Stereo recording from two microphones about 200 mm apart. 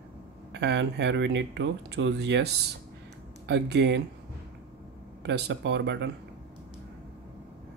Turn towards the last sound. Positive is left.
turn(degrees=-60)  # may be behind; listen again after turning